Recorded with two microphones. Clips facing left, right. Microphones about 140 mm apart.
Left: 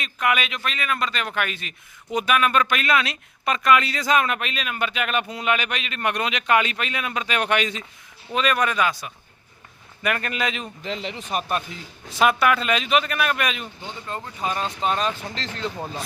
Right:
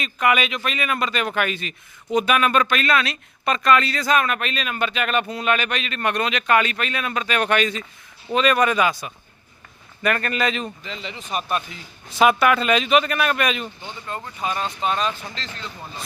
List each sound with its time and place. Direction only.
0.0 s speech: centre (ahead or behind)
2.6 s speech: 15° left (ahead or behind)
8.3 s speech: centre (ahead or behind)
10.0 s speech: 10° left (ahead or behind)
10.8 s speech: 70° left (ahead or behind); by 11.8 s 40° left (ahead or behind)
12.2 s speech: centre (ahead or behind)
14.8 s speech: 45° left (ahead or behind)
15.4 s speech: 80° left